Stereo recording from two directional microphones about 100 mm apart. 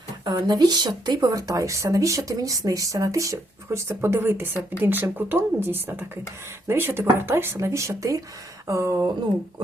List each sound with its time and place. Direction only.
0.3 s a woman's voice: 40° right (ahead or behind)